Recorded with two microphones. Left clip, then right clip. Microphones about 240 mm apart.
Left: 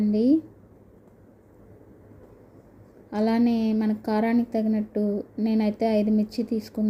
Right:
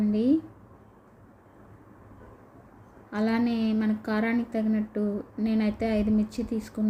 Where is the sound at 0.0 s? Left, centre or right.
Centre.